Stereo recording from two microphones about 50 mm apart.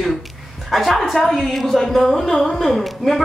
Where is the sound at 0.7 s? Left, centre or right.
Centre.